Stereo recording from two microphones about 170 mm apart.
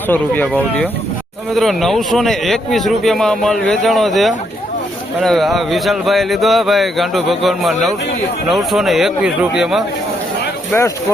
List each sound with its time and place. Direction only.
0.1 s speech: 10° left (ahead or behind)
10.7 s speech: 15° left (ahead or behind)